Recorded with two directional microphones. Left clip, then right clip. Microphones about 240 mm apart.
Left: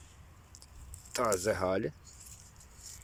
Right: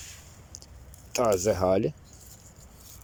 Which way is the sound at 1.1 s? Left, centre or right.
Centre.